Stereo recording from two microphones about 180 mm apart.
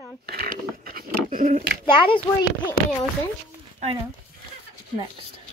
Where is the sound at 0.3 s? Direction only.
55° right (ahead or behind).